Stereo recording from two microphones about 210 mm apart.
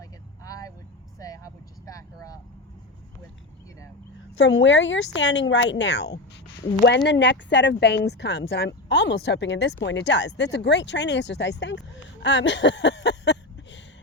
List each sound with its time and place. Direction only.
0.0 s vehicle: 15° left (ahead or behind)
1.9 s vehicle: 15° left (ahead or behind)
4.4 s speech: 60° left (ahead or behind)
12.2 s a sound: 60° left (ahead or behind)